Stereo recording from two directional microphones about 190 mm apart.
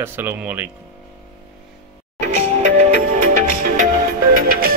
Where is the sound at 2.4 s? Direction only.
40° right (ahead or behind).